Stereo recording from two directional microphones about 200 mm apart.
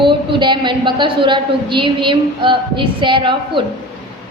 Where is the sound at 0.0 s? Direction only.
25° right (ahead or behind).